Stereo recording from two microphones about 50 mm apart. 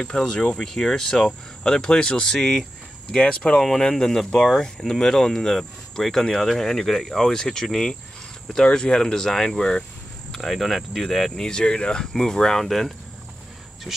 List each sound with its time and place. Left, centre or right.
0.0 s speech: centre
3.5 s speech: centre
10.3 s speech: centre